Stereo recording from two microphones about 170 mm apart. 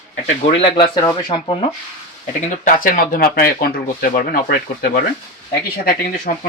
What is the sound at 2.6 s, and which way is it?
Speech, 55° left (ahead or behind).